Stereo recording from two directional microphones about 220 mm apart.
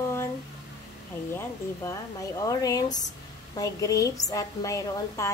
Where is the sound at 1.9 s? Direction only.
15° left (ahead or behind).